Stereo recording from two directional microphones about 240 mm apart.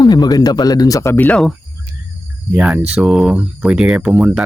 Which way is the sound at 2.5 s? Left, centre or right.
Centre.